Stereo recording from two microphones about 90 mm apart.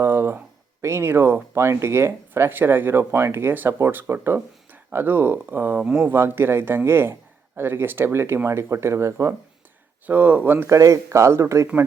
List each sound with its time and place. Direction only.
0.0 s a sound: 25° right (ahead or behind)
1.5 s speech: 30° right (ahead or behind)
10.1 s speech: 20° right (ahead or behind)
10.7 s speech: 35° right (ahead or behind)